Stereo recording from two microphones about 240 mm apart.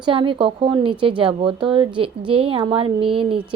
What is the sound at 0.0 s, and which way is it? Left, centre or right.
Speech, right.